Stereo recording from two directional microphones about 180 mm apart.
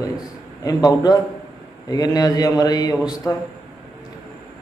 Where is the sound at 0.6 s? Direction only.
20° left (ahead or behind).